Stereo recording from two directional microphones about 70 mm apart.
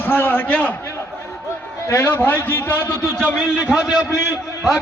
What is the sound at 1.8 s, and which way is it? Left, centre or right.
A man's voice, left.